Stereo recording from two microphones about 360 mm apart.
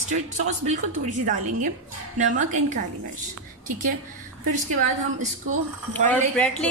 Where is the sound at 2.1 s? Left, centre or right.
Right.